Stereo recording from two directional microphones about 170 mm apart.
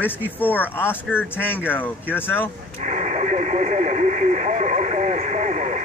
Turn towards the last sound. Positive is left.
turn(degrees=-45)  # may be behind; listen again after turning